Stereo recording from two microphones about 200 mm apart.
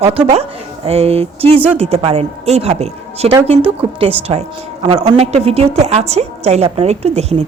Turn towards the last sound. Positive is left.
turn(degrees=-30)  # may be behind; listen again after turning